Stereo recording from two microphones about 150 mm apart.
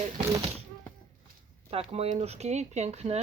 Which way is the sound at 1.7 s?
40° right (ahead or behind).